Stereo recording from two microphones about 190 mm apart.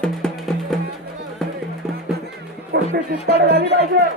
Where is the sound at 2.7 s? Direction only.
55° right (ahead or behind).